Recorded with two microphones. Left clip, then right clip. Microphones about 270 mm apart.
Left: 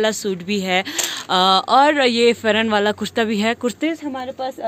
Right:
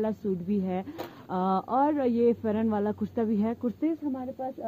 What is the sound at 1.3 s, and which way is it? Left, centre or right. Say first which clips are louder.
Speech: left 13 dB; left.